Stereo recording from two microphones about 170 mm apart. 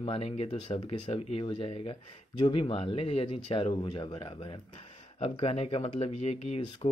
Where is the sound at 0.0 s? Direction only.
35° left (ahead or behind).